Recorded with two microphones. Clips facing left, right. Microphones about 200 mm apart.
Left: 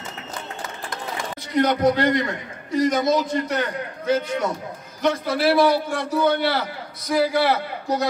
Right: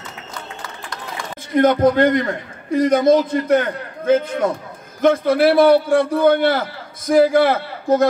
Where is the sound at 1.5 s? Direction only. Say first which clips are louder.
Right 5 dB; 50° right (ahead or behind).